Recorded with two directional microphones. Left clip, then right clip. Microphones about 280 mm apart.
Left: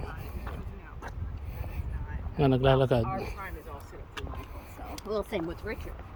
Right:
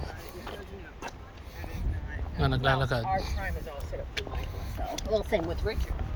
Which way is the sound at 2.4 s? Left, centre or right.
Left.